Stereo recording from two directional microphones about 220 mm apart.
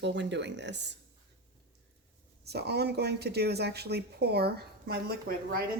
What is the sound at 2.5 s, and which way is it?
Speech, 50° right (ahead or behind).